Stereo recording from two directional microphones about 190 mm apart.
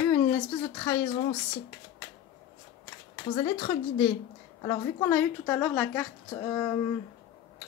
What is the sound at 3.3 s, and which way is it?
A woman's voice, 20° left (ahead or behind).